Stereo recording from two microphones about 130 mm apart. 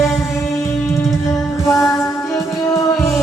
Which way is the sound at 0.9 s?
20° left (ahead or behind).